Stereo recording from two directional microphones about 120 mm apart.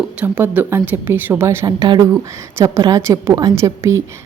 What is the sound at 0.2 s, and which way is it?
A woman's voice, 15° right (ahead or behind).